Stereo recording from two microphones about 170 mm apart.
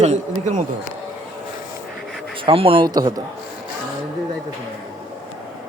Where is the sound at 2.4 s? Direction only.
35° right (ahead or behind).